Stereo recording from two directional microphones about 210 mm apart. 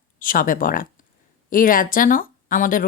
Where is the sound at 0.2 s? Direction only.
40° left (ahead or behind).